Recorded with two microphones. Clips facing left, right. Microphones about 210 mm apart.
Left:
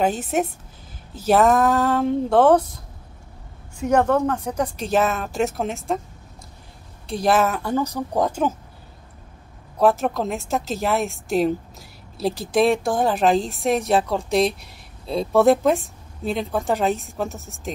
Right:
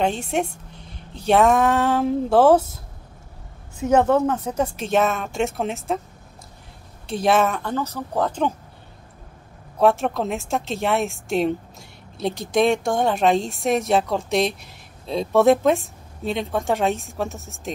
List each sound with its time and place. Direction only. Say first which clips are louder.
0.0 s a woman's voice: left 1 dB; 5° left (ahead or behind)
3.9 s a woman's voice: right 1 dB; 5° right (ahead or behind)
7.1 s a woman's voice: even; centre (ahead or behind)
9.8 s a woman's voice: even; centre (ahead or behind)